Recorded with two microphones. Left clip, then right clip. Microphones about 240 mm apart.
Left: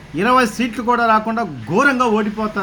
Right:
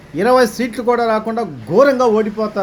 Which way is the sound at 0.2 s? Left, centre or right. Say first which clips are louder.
Right 2 dB; centre.